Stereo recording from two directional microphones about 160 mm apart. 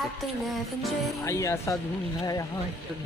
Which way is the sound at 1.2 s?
20° left (ahead or behind).